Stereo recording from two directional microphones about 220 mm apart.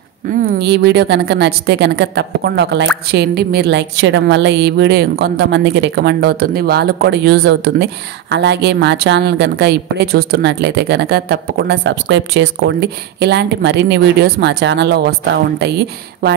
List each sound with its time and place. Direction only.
0.3 s a woman's voice: 40° right (ahead or behind)